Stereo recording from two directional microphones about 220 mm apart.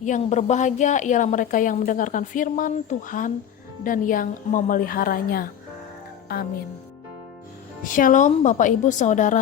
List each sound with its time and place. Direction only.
0.0 s a woman's voice: 30° left (ahead or behind)
7.9 s a woman's voice: 35° left (ahead or behind)